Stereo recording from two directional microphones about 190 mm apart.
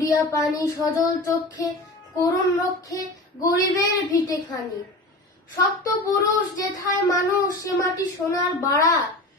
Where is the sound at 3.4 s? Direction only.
20° left (ahead or behind).